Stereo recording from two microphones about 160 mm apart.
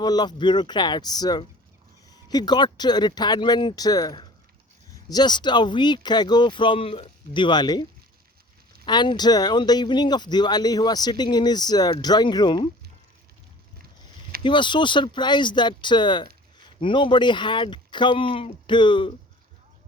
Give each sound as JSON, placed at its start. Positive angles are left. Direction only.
{"t": 0.0, "sound": "speech", "side_deg": 25}
{"t": 14.4, "sound": "speech", "side_deg": 30}